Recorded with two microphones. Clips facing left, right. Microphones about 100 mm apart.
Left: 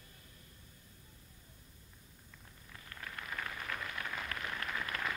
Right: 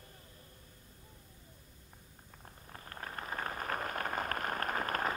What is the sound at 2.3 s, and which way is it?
Rain, 45° right (ahead or behind).